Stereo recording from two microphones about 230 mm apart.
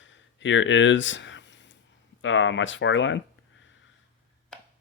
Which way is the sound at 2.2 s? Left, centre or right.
Left.